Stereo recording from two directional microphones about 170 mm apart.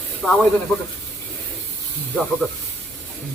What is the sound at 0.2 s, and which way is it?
Speech, centre (ahead or behind).